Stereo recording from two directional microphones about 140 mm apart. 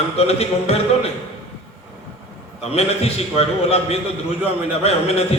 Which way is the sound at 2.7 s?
45° left (ahead or behind).